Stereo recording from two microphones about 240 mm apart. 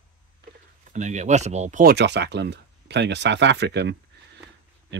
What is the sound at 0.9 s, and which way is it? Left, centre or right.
Speech, right.